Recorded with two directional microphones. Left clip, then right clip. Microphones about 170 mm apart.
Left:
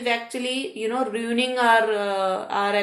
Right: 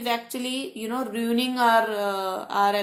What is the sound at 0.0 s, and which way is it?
Speech, 45° right (ahead or behind).